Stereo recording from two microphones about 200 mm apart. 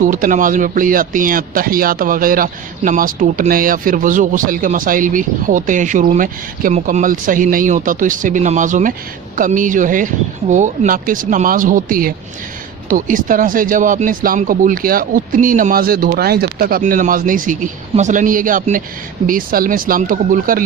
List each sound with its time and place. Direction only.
0.0 s speech: 40° right (ahead or behind)